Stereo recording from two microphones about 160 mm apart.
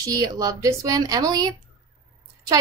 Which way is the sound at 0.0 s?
25° right (ahead or behind).